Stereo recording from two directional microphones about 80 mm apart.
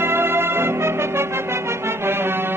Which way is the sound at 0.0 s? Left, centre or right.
Right.